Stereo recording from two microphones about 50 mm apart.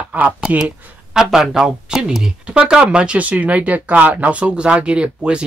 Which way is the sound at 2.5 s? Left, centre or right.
Right.